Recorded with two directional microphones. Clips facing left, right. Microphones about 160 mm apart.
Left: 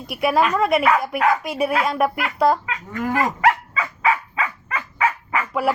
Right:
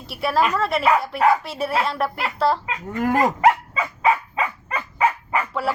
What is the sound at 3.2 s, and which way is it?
Dog, 20° right (ahead or behind).